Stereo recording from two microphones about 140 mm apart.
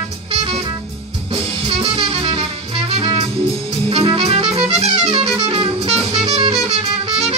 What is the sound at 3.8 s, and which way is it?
Music, 40° right (ahead or behind).